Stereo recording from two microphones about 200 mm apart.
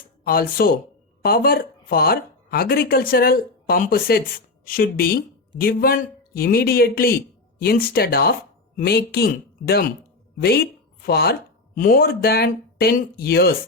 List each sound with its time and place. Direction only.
0.3 s a man's voice: 45° left (ahead or behind)